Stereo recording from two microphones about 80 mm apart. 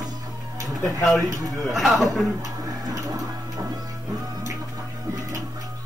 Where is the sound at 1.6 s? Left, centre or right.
Centre.